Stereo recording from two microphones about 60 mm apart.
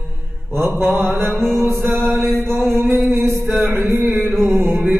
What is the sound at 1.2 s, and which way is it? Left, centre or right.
Music, right.